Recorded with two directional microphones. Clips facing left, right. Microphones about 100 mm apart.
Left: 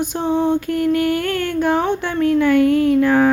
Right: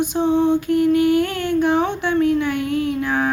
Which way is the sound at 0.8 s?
50° left (ahead or behind).